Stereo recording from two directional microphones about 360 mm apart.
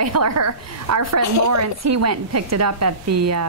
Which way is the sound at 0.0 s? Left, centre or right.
Right.